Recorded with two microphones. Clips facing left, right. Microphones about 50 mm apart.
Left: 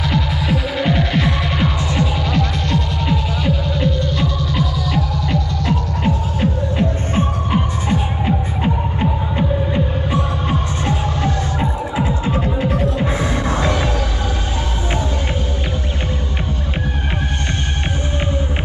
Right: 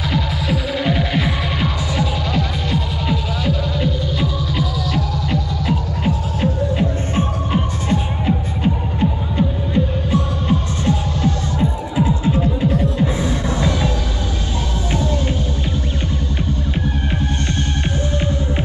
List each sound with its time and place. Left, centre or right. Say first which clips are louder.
0.1 s music: even; centre
10.1 s music: right 2 dB; left
12.6 s music: right 1 dB; left